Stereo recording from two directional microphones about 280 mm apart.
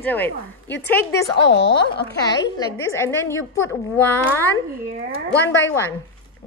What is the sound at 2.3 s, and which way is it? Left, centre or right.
A woman's voice, centre.